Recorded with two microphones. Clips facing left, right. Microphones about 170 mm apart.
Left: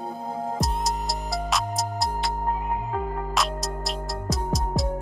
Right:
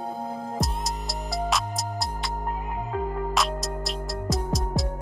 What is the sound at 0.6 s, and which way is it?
Music, centre (ahead or behind).